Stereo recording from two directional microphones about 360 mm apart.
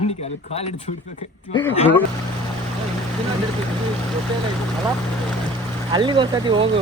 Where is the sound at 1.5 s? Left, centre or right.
Centre.